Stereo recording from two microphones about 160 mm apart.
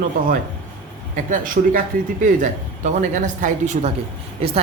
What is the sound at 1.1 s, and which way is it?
Speech, 55° right (ahead or behind).